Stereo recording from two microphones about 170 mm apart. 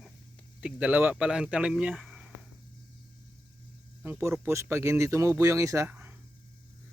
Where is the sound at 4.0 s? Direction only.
15° right (ahead or behind).